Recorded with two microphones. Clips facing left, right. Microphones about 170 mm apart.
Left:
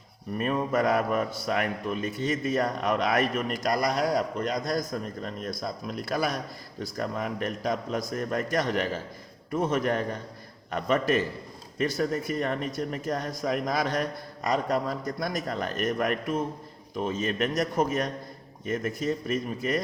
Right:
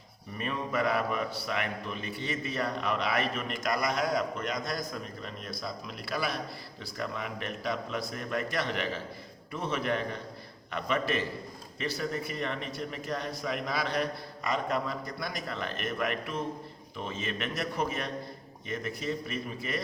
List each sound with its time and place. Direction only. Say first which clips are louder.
0.3 s a man's voice: left 6 dB; 45° left (ahead or behind)